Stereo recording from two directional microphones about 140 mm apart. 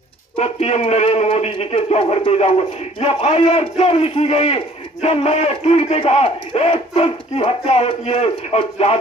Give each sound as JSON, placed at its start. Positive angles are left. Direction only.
{"t": 0.4, "sound": "a man's voice", "side_deg": 50}